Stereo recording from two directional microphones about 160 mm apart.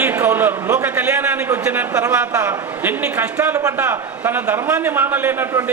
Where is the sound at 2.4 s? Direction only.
20° right (ahead or behind).